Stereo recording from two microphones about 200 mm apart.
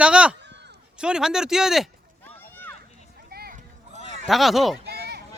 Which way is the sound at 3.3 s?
50° right (ahead or behind).